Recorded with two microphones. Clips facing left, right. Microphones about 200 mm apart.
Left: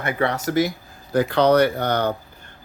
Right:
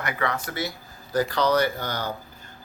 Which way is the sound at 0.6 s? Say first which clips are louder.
Left 10 dB; 75° left (ahead or behind).